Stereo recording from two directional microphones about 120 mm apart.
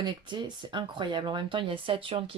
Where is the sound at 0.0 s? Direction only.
40° right (ahead or behind).